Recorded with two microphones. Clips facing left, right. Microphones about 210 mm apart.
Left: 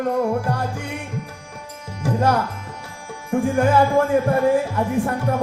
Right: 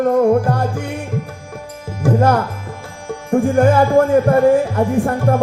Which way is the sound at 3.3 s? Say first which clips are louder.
Right 5 dB; 50° right (ahead or behind).